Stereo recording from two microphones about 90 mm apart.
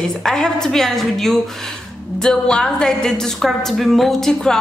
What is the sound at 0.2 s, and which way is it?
A woman's voice, 5° left (ahead or behind).